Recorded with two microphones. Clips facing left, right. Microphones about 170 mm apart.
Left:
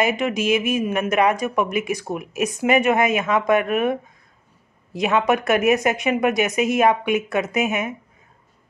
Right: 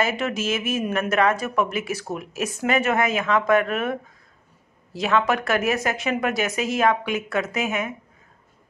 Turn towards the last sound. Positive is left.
turn(degrees=20)  # may be behind; listen again after turning